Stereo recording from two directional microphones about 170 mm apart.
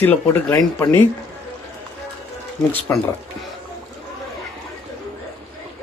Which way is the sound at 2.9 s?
10° left (ahead or behind).